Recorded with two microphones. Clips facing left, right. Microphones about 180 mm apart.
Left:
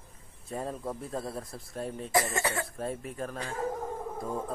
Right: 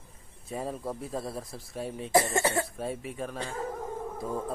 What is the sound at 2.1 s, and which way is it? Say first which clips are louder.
Speech: right 4 dB; 30° right (ahead or behind).